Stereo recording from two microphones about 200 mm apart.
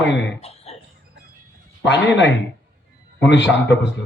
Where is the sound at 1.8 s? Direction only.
60° left (ahead or behind).